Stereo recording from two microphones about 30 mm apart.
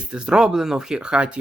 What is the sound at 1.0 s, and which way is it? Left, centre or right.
Speech, right.